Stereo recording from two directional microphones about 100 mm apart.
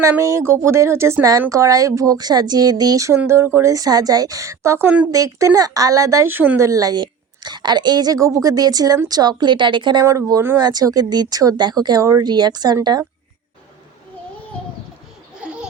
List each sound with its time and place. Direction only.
0.2 s a woman's voice: 30° right (ahead or behind)
6.2 s speech: 20° right (ahead or behind)
6.6 s a woman's voice: 35° right (ahead or behind); by 10.0 s 50° right (ahead or behind)
10.0 s a woman's voice: 35° right (ahead or behind)
12.2 s speech: 45° right (ahead or behind)
15.4 s laughter: 15° right (ahead or behind)